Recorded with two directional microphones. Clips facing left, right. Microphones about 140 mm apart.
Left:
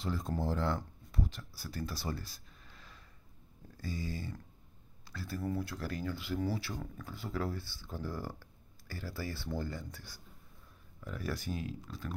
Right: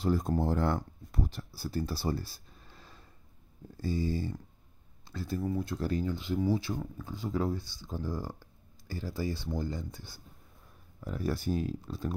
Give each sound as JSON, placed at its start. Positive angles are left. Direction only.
{"t": 0.0, "sound": "speech", "side_deg": -45}
{"t": 1.5, "sound": "speech", "side_deg": -30}